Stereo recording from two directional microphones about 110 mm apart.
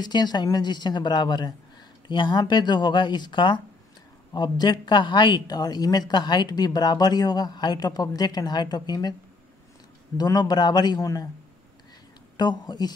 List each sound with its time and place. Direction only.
0.0 s speech: 40° left (ahead or behind)
10.1 s speech: 35° left (ahead or behind)
12.4 s speech: 40° left (ahead or behind)